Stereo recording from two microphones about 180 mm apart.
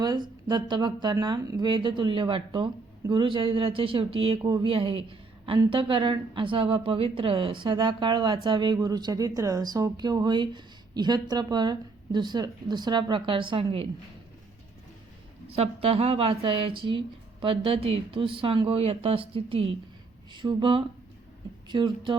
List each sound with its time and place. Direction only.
0.4 s speech: 25° right (ahead or behind)
15.4 s speech: 35° right (ahead or behind)